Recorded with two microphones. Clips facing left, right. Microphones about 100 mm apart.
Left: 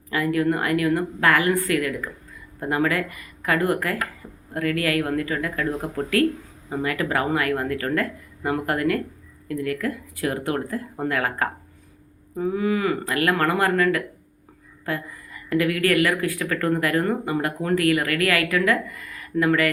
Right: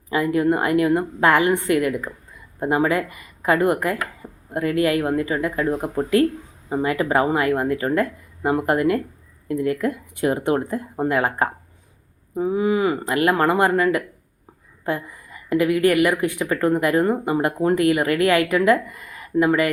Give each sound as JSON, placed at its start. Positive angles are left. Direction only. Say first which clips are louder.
{"t": 0.1, "sound": "speech", "louder": "right 3 dB", "side_deg": -20}